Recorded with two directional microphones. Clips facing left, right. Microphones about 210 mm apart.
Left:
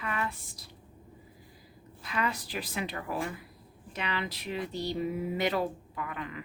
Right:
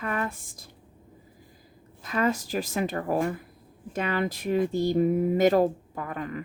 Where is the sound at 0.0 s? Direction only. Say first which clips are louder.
Right 5 dB; 45° right (ahead or behind).